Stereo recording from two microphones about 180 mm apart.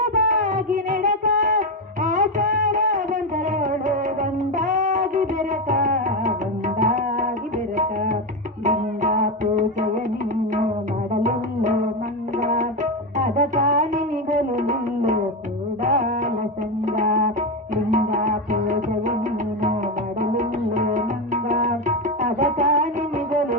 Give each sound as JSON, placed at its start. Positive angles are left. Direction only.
{"t": 0.0, "sound": "music", "side_deg": -45}
{"t": 8.6, "sound": "music", "side_deg": -45}
{"t": 11.1, "sound": "music", "side_deg": -45}
{"t": 20.3, "sound": "music", "side_deg": -45}